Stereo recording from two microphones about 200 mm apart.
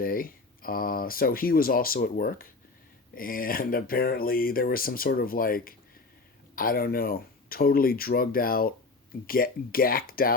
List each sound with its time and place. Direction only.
0.0 s speech: 45° left (ahead or behind)